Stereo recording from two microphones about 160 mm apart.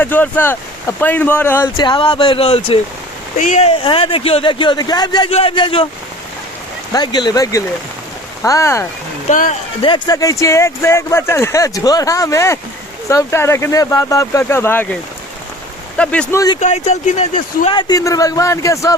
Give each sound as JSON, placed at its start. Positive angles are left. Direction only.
{"t": 0.0, "sound": "speech", "side_deg": 10}
{"t": 1.7, "sound": "speech", "side_deg": 30}
{"t": 3.3, "sound": "speech", "side_deg": 50}
{"t": 3.8, "sound": "speech", "side_deg": 35}
{"t": 6.9, "sound": "speech", "side_deg": 25}
{"t": 9.3, "sound": "speech", "side_deg": 55}
{"t": 9.8, "sound": "speech", "side_deg": 25}
{"t": 16.0, "sound": "speech", "side_deg": 5}
{"t": 16.6, "sound": "speech", "side_deg": 45}
{"t": 17.7, "sound": "speech", "side_deg": 25}